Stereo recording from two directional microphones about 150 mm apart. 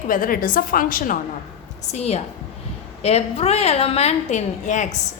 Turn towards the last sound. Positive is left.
turn(degrees=55)  # may be behind; listen again after turning